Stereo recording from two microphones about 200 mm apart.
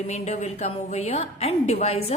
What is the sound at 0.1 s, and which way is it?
A woman's voice, 35° left (ahead or behind).